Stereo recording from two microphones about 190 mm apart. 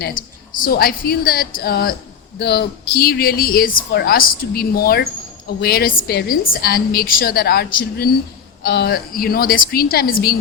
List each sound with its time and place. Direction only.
0.6 s speech: 50° left (ahead or behind)